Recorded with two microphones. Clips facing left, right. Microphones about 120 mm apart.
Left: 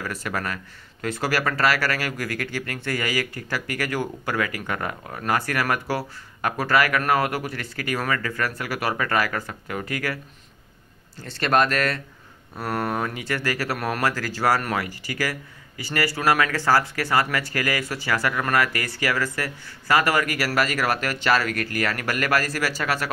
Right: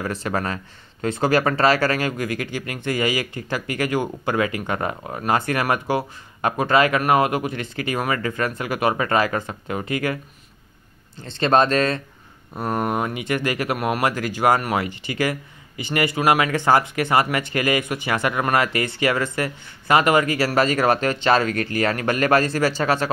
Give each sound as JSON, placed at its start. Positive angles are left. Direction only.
{"t": 0.0, "sound": "speech", "side_deg": -25}
{"t": 11.1, "sound": "speech", "side_deg": -20}